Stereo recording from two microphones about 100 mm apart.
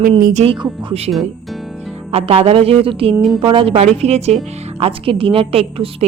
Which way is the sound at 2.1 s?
80° right.